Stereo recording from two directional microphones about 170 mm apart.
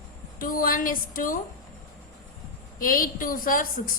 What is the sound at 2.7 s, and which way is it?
Speech, 55° left (ahead or behind).